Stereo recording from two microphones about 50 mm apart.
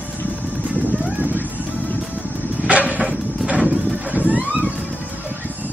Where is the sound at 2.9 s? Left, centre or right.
Right.